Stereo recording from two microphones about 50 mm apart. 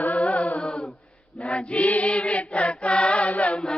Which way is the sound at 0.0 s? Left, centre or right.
Left.